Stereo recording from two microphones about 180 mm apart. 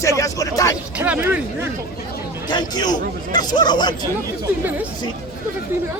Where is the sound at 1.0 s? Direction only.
10° right (ahead or behind).